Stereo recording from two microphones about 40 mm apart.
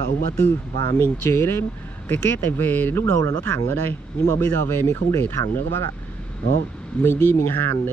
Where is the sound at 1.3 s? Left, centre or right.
Left.